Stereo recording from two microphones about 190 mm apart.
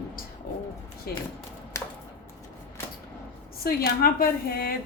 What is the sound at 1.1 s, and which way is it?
Speech, 55° left (ahead or behind).